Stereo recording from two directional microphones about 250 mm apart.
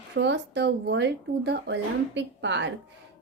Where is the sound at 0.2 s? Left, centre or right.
Right.